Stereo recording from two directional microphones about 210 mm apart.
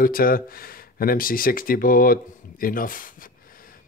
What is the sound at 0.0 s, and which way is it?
Speech, 45° left (ahead or behind).